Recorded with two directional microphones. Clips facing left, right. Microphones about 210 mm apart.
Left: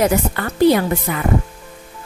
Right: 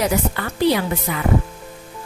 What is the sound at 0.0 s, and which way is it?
A woman's voice, 50° left (ahead or behind).